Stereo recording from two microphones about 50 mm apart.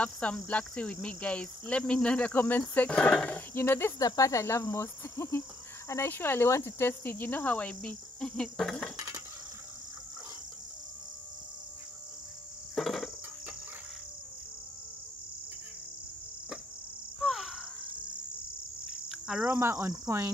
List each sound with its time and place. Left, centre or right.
0.0 s cricket: left
3.3 s speech: left
4.3 s insect: left
6.0 s speech: left
6.5 s cricket: left
8.2 s cricket: centre
12.7 s cricket: centre
17.2 s cricket: centre
19.0 s insect: centre
19.6 s cricket: right